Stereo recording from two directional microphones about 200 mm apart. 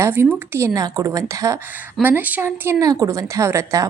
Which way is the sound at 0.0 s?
10° right (ahead or behind).